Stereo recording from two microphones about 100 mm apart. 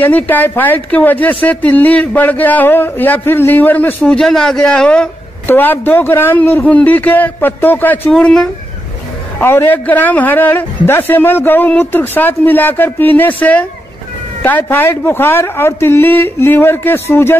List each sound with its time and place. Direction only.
0.0 s speech: 20° left (ahead or behind)
4.0 s speech: 5° left (ahead or behind)
5.5 s a man's voice: 20° left (ahead or behind)
8.1 s speech: 5° left (ahead or behind)
9.4 s a man's voice: 25° left (ahead or behind)